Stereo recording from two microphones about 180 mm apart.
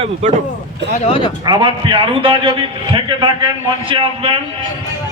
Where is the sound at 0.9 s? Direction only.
35° left (ahead or behind).